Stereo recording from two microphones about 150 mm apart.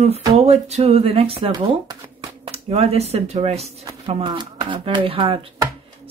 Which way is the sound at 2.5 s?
45° right (ahead or behind).